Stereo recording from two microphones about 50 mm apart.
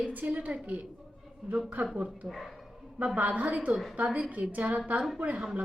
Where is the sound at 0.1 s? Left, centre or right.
Right.